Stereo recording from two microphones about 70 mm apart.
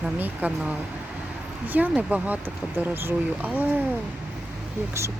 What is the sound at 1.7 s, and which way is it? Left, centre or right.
Speech, right.